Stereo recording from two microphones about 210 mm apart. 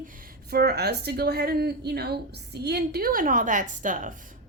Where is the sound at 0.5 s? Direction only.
50° right (ahead or behind).